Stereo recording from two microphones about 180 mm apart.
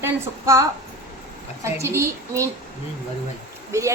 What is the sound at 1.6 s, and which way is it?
Speech, 15° right (ahead or behind).